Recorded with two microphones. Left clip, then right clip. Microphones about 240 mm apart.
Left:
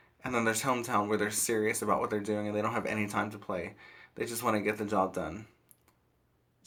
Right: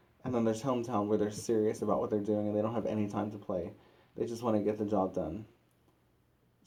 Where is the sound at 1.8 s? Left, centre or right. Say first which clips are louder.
Left 2 dB; left.